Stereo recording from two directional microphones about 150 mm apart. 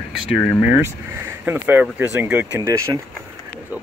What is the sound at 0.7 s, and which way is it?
Speech, 15° right (ahead or behind).